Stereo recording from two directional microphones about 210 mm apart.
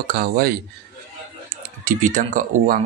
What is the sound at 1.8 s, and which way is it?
Speech, 40° right (ahead or behind).